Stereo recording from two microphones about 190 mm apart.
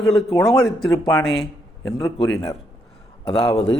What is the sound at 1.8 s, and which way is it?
Speech, 15° left (ahead or behind).